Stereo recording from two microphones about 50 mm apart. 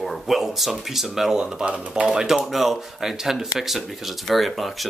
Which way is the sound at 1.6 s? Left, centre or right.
Right.